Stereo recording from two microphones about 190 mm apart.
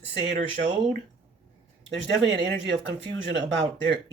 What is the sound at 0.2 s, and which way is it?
Speech, 65° right (ahead or behind).